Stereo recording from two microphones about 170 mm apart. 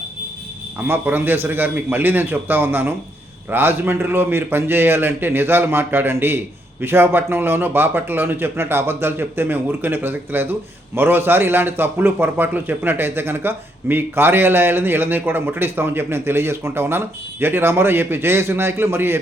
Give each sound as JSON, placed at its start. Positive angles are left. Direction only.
{"t": 0.9, "sound": "a man's voice", "side_deg": -10}